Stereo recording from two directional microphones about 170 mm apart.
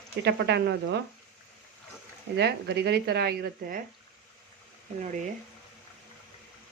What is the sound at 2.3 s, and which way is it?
Speech, 75° right (ahead or behind).